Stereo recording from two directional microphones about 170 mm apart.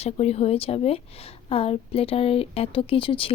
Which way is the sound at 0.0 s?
35° left (ahead or behind).